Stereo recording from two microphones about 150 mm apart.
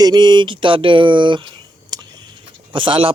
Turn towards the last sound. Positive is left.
turn(degrees=-35)  # may be behind; listen again after turning